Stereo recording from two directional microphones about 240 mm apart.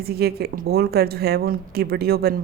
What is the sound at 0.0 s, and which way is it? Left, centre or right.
A woman's voice, right.